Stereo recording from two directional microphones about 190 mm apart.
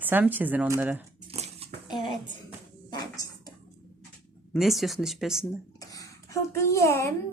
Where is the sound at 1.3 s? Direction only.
35° right (ahead or behind).